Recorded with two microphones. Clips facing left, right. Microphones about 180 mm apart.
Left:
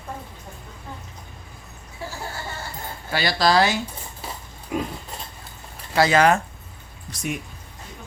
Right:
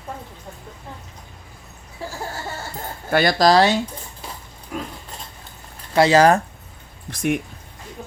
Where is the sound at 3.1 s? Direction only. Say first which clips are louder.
Right 5 dB; 50° right (ahead or behind); by 3.8 s 35° right (ahead or behind).